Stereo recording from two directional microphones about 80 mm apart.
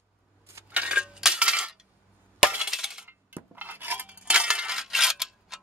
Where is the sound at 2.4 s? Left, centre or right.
Centre.